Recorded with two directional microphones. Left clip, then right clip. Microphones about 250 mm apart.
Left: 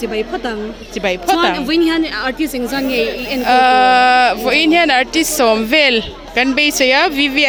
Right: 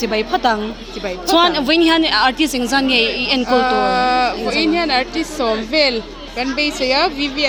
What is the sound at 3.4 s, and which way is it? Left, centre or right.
Speech, left.